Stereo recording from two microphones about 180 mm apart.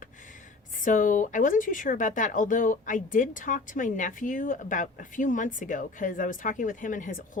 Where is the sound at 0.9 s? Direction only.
45° left (ahead or behind).